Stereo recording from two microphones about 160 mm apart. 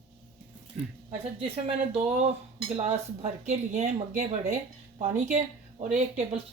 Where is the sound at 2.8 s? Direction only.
45° right (ahead or behind).